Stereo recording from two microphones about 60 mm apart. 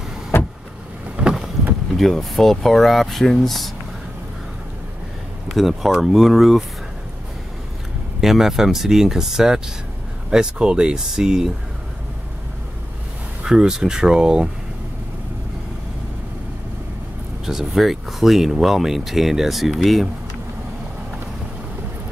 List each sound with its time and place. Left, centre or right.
0.3 s vehicle: left
1.1 s boat: centre
2.0 s speech: centre
5.5 s speech: centre
8.2 s speech: centre
13.4 s speech: centre
17.5 s speech: centre